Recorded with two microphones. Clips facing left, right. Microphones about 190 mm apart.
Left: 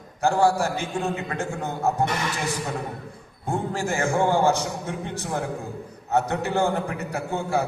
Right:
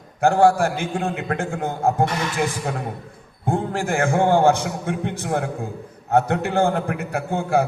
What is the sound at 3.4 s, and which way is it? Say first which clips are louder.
A man's voice: right 3 dB; 55° right (ahead or behind).